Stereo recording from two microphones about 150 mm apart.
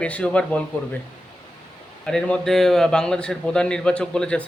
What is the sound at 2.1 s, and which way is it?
A man's voice, 5° left (ahead or behind).